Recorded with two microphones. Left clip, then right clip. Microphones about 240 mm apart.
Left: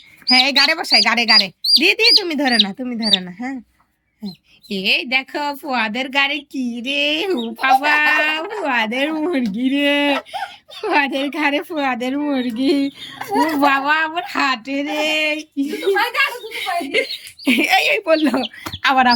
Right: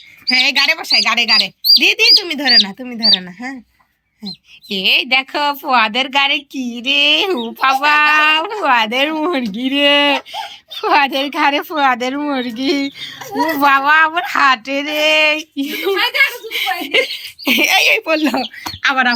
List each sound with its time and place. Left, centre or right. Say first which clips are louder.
0.3 s speech: right 1 dB; centre
4.7 s a woman's voice: right 4 dB; centre
13.3 s a child's voice: even; left
13.6 s a woman's voice: right 8 dB; centre